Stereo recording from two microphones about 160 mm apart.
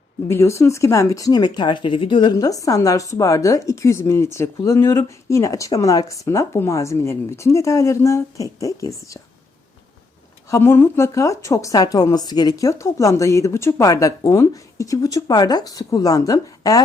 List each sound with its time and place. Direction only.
0.3 s a woman's voice: 15° left (ahead or behind)
10.5 s a woman's voice: 15° left (ahead or behind)